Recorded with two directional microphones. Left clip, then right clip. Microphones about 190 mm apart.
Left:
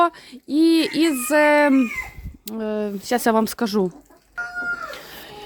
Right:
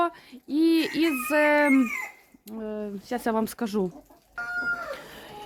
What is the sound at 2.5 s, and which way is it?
Speech, 40° left (ahead or behind).